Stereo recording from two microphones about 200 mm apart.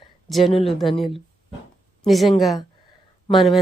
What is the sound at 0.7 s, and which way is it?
Speech, centre (ahead or behind).